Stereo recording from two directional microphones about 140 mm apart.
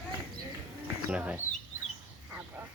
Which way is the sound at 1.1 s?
10° right (ahead or behind).